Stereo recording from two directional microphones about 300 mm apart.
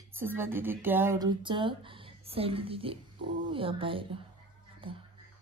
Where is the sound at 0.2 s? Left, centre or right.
Centre.